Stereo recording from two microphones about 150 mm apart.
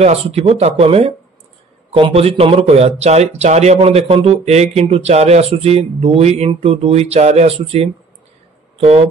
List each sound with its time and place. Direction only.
0.0 s speech: 45° right (ahead or behind)